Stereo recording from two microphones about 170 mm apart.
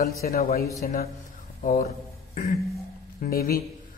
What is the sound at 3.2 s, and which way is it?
Speech, 60° left (ahead or behind).